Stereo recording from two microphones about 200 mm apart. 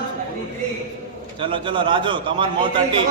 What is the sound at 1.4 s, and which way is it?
A man's voice, 25° right (ahead or behind).